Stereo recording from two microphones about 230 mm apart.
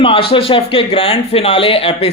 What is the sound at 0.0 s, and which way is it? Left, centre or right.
Speech, left.